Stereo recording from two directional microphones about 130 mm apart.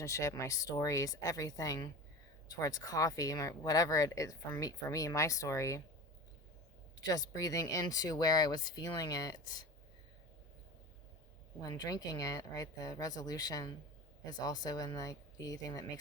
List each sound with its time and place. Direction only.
0.0 s speech: 25° left (ahead or behind)
7.0 s speech: 30° left (ahead or behind)
11.6 s speech: 30° left (ahead or behind)